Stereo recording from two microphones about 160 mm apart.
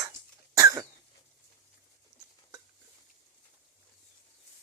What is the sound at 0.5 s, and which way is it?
Cough, 20° right (ahead or behind).